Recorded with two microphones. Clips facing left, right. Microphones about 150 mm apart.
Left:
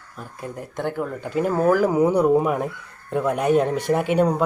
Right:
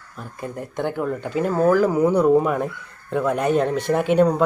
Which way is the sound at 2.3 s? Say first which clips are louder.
Right 2 dB; 5° left (ahead or behind).